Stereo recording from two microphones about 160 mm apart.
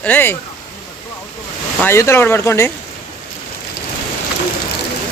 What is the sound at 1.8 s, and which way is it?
Speech, 15° left (ahead or behind).